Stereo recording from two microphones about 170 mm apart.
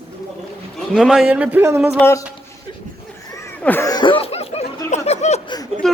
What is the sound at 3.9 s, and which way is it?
Laughter, 30° left (ahead or behind).